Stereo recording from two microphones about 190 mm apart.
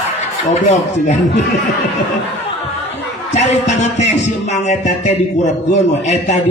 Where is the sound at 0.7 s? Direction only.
35° left (ahead or behind).